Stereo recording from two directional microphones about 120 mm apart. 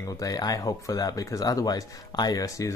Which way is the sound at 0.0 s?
30° left (ahead or behind).